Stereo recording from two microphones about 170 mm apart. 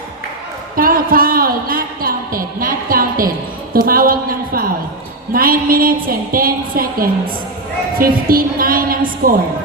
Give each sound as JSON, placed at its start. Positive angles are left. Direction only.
{"t": 0.8, "sound": "speech", "side_deg": -55}
{"t": 3.7, "sound": "a sound", "side_deg": -60}
{"t": 5.3, "sound": "speech", "side_deg": -60}